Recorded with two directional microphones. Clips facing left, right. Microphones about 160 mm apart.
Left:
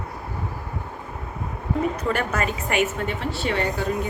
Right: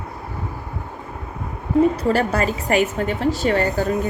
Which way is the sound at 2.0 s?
35° right (ahead or behind).